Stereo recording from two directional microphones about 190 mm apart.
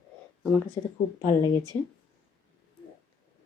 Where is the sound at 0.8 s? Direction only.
20° left (ahead or behind).